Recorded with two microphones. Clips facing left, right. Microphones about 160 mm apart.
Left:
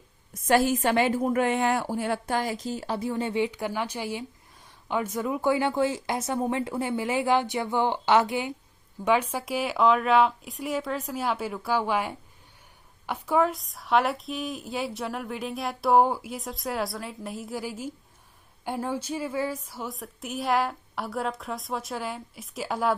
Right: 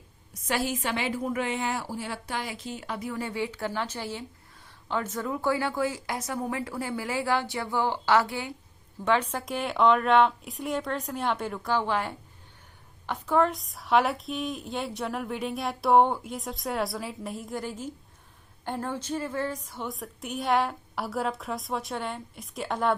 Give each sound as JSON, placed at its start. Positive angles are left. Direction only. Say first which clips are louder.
{"t": 0.4, "sound": "a woman's voice", "louder": "left 7 dB", "side_deg": 45}